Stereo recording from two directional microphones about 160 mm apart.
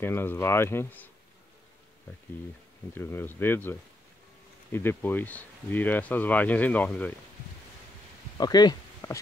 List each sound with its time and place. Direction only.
0.0 s speech: 15° left (ahead or behind)
2.9 s speech: 15° left (ahead or behind)
4.7 s speech: 10° left (ahead or behind)
8.4 s speech: 25° left (ahead or behind)